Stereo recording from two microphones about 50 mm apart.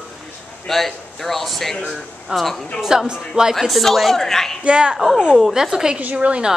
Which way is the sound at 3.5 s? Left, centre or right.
Centre.